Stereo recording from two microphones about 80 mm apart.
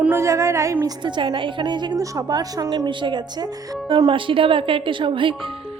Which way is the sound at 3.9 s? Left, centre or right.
Right.